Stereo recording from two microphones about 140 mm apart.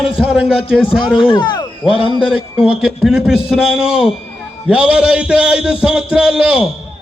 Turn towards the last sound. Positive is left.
turn(degrees=-5)  # may be behind; listen again after turning